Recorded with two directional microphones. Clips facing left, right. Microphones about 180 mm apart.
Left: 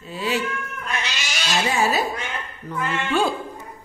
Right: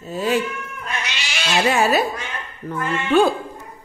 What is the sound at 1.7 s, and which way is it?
Speech, 65° right (ahead or behind).